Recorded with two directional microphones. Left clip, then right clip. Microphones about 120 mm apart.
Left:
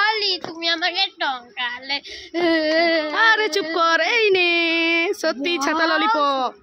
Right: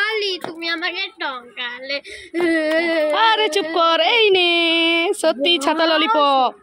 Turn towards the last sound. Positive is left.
turn(degrees=-10)  # may be behind; listen again after turning